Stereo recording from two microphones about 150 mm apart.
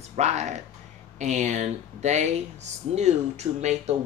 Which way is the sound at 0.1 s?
50° right (ahead or behind).